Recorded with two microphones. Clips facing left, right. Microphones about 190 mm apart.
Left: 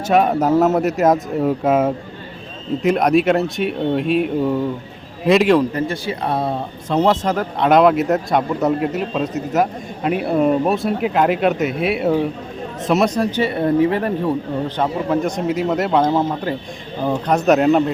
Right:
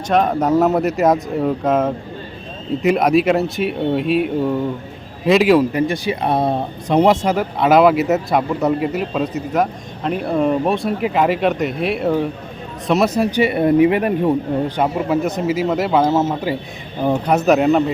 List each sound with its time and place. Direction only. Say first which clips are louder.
0.1 s speech: left 1 dB; 5° left (ahead or behind); by 14.3 s 15° right (ahead or behind)
14.8 s speech: left 1 dB; 5° right (ahead or behind)